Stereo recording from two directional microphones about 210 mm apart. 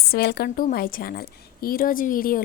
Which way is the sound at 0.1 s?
50° left (ahead or behind).